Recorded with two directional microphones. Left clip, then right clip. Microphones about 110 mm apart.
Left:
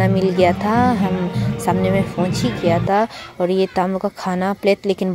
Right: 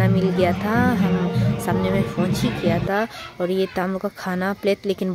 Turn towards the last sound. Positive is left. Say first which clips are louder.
# left 4 dB
turn(degrees=30)  # may be behind; listen again after turning